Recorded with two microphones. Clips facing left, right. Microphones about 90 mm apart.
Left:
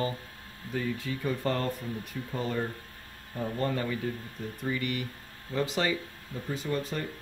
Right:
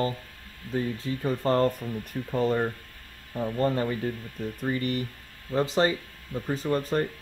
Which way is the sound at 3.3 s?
35° right (ahead or behind).